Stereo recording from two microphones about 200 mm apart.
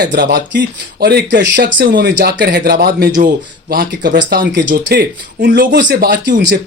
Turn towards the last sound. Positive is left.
turn(degrees=-45)  # may be behind; listen again after turning